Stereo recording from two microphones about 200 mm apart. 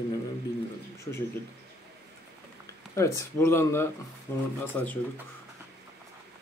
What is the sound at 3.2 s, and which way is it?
Speech, 10° left (ahead or behind).